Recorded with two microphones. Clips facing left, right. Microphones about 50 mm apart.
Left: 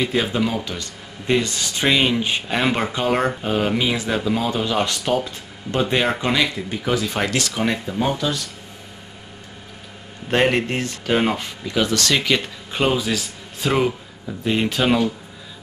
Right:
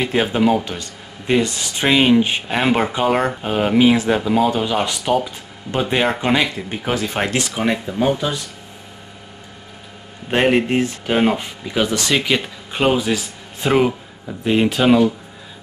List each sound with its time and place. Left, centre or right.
0.0 s speech: right; by 3.5 s centre
3.5 s speech: centre
6.7 s speech: right
7.6 s speech: centre
10.3 s speech: centre